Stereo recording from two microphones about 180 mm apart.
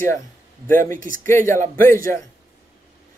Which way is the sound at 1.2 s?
15° left (ahead or behind).